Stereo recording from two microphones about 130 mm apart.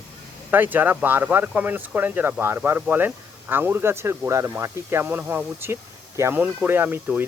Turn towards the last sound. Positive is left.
turn(degrees=-15)  # may be behind; listen again after turning